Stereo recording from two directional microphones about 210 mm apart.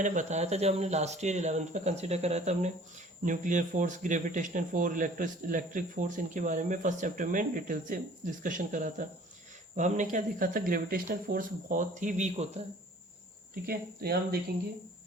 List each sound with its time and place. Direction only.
0.0 s speech: 35° right (ahead or behind)
13.7 s speech: 50° right (ahead or behind)